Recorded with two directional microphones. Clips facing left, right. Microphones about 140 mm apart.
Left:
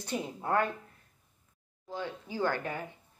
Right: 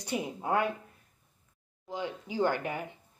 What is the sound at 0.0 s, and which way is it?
Speech, 15° right (ahead or behind).